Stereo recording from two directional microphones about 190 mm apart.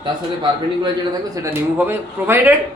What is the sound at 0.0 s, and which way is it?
Speech, 25° right (ahead or behind).